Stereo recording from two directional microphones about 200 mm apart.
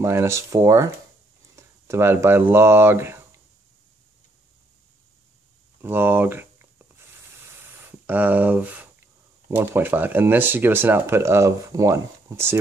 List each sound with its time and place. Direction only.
0.0 s speech: 15° right (ahead or behind)
5.8 s a sound: 10° right (ahead or behind)
8.1 s speech: 10° right (ahead or behind)